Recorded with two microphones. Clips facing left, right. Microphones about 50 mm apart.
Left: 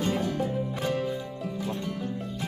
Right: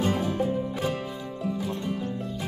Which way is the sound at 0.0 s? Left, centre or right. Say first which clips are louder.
Right 2 dB; centre.